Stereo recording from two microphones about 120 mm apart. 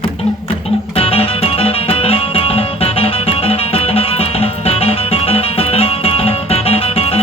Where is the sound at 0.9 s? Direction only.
55° left (ahead or behind).